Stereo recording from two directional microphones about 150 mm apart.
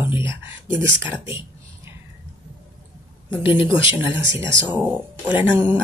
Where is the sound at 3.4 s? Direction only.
15° right (ahead or behind).